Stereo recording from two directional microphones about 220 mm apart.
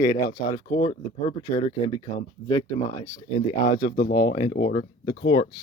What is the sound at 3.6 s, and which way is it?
Speech, 40° left (ahead or behind).